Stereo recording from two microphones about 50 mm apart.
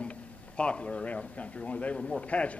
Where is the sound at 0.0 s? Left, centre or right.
Left.